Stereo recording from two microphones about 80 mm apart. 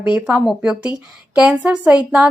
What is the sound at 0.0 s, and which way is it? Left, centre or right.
A woman's voice, centre.